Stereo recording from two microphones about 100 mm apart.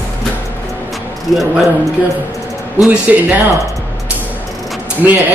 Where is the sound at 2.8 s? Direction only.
10° right (ahead or behind).